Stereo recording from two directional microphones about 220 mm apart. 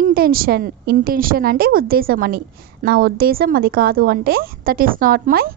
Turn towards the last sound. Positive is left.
turn(degrees=-40)  # may be behind; listen again after turning